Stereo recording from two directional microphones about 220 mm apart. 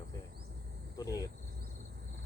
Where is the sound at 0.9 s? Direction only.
15° left (ahead or behind).